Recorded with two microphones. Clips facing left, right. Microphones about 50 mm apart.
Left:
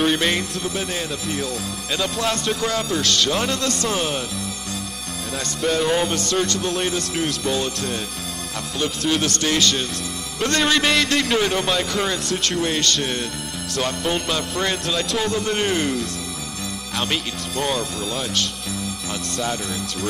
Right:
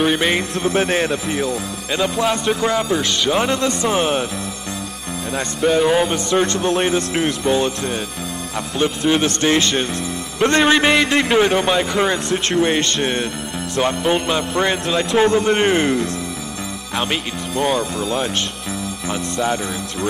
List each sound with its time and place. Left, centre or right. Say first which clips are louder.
0.0 s speech: right 3 dB; centre
0.4 s speech: right 7 dB; right
1.3 s music: right 5 dB; centre
5.3 s music: right 5 dB; centre
16.9 s speech: right 3 dB; centre
18.1 s music: right 4 dB; right